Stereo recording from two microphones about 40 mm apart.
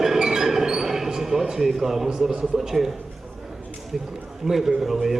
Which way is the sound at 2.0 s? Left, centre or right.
Right.